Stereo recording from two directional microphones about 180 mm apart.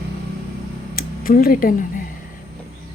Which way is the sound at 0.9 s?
55° left (ahead or behind).